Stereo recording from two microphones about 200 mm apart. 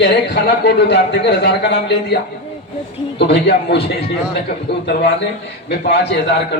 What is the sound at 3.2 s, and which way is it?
Speech, 55° left (ahead or behind).